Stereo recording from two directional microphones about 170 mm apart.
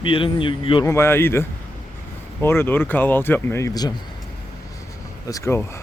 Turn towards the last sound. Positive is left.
turn(degrees=15)  # may be behind; listen again after turning